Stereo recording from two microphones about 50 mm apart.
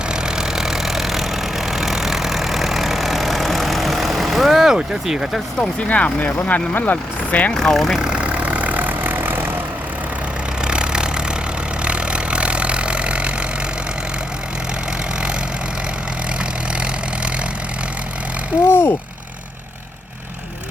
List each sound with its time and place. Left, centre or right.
0.1 s vehicle: centre
5.9 s speech: left
7.5 s speech: centre
7.9 s vehicle: centre
8.2 s vehicle: right
10.6 s vehicle: centre
16.4 s vehicle: right
18.6 s a sound: left